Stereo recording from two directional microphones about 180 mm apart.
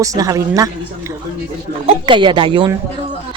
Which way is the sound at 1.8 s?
25° right (ahead or behind).